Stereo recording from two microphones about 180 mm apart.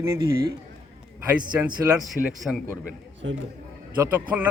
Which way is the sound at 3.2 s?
90° right.